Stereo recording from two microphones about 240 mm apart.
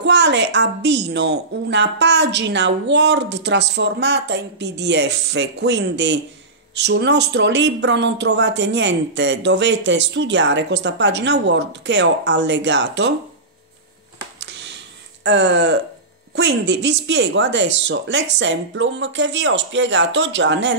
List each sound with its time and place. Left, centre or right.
0.0 s speech: right
14.4 s a sound: right
15.2 s speech: right